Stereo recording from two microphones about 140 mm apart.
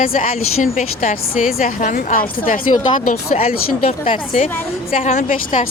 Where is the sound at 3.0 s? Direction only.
65° left (ahead or behind).